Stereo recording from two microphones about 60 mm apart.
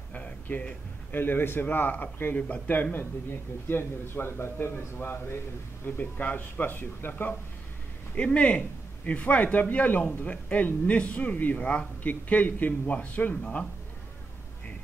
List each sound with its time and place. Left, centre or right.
0.1 s a man's voice: left
2.3 s a man's voice: left
8.1 s speech: centre